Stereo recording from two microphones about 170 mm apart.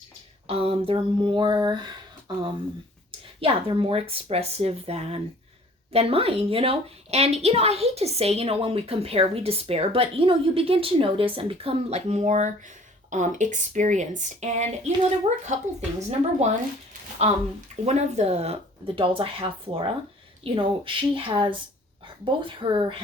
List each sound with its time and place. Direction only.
0.4 s a sound: 35° right (ahead or behind)
3.4 s a woman's voice: 30° right (ahead or behind)
17.8 s a woman's voice: 40° right (ahead or behind)